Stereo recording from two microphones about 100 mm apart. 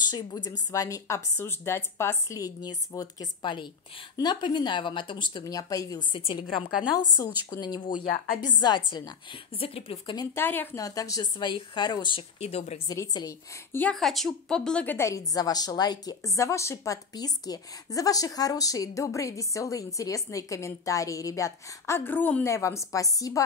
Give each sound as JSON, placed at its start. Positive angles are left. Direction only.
{"t": 0.1, "sound": "a woman's voice", "side_deg": 45}
{"t": 5.4, "sound": "a woman's voice", "side_deg": 35}
{"t": 6.1, "sound": "a woman's voice", "side_deg": 55}
{"t": 7.1, "sound": "a woman's voice", "side_deg": 40}
{"t": 9.6, "sound": "a woman's voice", "side_deg": 75}
{"t": 10.3, "sound": "a woman's voice", "side_deg": 20}
{"t": 10.8, "sound": "a woman's voice", "side_deg": 35}
{"t": 12.4, "sound": "speech", "side_deg": 90}
{"t": 12.8, "sound": "a woman's voice", "side_deg": 35}
{"t": 13.7, "sound": "a woman's voice", "side_deg": 20}
{"t": 13.9, "sound": "a woman's voice", "side_deg": 0}
{"t": 15.0, "sound": "a woman's voice", "side_deg": 35}
{"t": 22.1, "sound": "speech", "side_deg": 15}
{"t": 22.5, "sound": "a woman's voice", "side_deg": 30}